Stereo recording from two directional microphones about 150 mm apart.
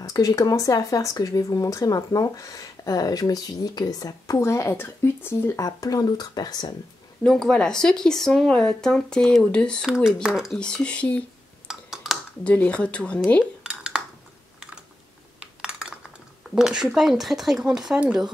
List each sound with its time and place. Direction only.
0.0 s speech: 25° left (ahead or behind)
7.2 s speech: 5° left (ahead or behind)
11.6 s a sound: centre (ahead or behind)
12.4 s speech: 10° left (ahead or behind)
13.4 s dishes: 5° right (ahead or behind)
15.4 s speech: 5° right (ahead or behind)